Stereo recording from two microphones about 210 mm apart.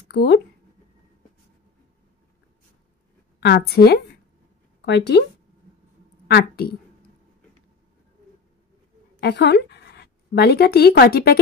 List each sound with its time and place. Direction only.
0.1 s speech: 50° left (ahead or behind)
3.3 s a woman's voice: 50° left (ahead or behind)
6.2 s a woman's voice: 50° left (ahead or behind)
9.2 s a woman's voice: 55° left (ahead or behind)